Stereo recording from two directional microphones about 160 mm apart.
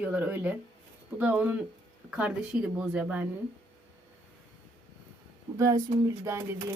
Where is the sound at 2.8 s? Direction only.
5° right (ahead or behind).